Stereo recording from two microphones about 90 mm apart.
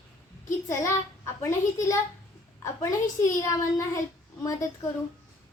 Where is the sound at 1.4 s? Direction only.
35° left (ahead or behind).